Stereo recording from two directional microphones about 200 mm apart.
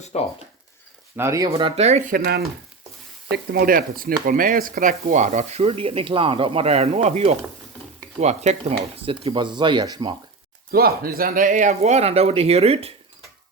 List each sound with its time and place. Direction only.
0.1 s speech: 30° left (ahead or behind)
1.1 s speech: 15° right (ahead or behind)
1.5 s speech: 25° right (ahead or behind)
10.7 s speech: 50° right (ahead or behind); by 12.9 s 30° right (ahead or behind)